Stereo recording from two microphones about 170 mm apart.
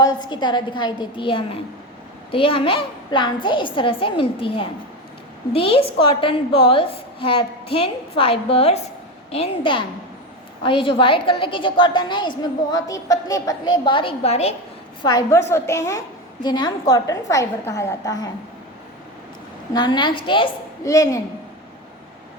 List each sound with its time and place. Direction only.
0.0 s a woman's voice: 25° left (ahead or behind)
15.0 s a woman's voice: 20° left (ahead or behind)
19.7 s a woman's voice: 25° left (ahead or behind)